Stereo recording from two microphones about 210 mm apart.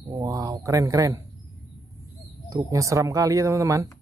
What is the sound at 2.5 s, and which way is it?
Speech, 15° right (ahead or behind).